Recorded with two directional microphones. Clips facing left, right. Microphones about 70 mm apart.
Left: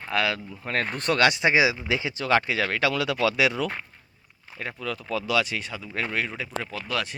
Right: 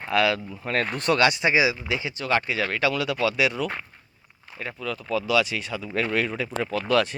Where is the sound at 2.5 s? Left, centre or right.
Left.